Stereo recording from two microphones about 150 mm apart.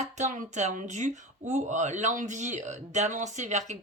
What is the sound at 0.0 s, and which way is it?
Speech, 50° right (ahead or behind).